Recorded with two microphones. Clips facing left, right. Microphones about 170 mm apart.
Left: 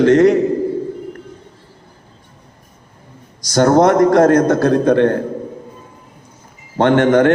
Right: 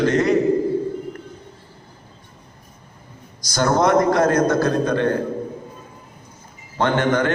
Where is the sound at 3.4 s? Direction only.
70° left (ahead or behind).